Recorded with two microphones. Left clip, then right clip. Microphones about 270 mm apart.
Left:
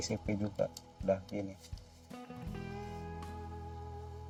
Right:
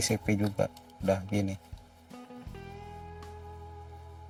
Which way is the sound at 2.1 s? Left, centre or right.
Centre.